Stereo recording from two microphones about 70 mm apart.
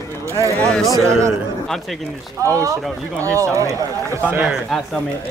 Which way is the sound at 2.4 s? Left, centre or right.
Right.